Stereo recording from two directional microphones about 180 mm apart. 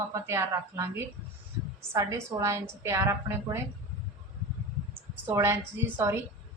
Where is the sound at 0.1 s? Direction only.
15° right (ahead or behind).